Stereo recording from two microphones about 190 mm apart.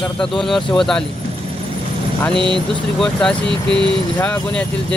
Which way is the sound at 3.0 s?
5° left (ahead or behind).